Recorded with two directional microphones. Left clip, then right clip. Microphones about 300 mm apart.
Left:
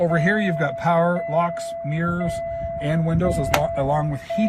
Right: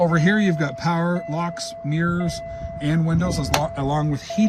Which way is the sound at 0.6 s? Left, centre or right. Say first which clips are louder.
Left 4 dB; centre.